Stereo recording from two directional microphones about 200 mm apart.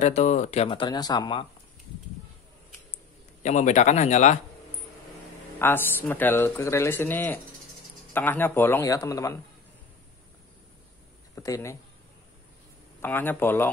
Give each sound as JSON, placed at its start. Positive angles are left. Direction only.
{"t": 0.0, "sound": "speech", "side_deg": 35}
{"t": 3.4, "sound": "speech", "side_deg": 35}
{"t": 5.6, "sound": "speech", "side_deg": 10}
{"t": 11.3, "sound": "speech", "side_deg": 15}
{"t": 13.0, "sound": "speech", "side_deg": 10}